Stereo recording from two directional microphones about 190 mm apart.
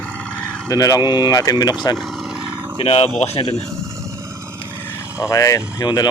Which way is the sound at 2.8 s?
30° left (ahead or behind).